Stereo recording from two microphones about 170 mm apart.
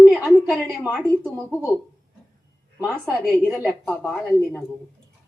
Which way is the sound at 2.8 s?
10° right (ahead or behind).